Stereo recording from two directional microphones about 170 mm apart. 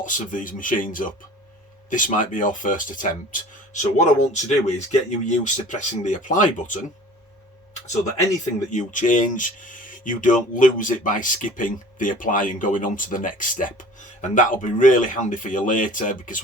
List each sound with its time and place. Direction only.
0.0 s speech: 50° left (ahead or behind)
8.7 s speech: 45° left (ahead or behind)